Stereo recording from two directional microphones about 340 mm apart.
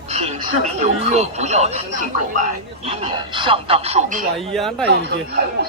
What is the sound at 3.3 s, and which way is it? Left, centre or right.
Speech, centre.